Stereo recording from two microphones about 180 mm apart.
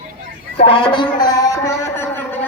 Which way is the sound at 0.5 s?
30° left (ahead or behind).